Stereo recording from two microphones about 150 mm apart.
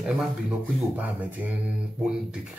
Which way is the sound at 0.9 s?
10° right (ahead or behind).